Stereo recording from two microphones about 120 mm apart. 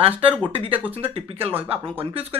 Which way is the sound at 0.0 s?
50° right (ahead or behind).